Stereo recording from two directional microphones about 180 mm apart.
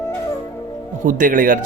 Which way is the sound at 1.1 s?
50° right (ahead or behind).